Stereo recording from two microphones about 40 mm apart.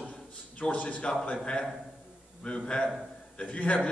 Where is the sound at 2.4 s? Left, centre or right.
Left.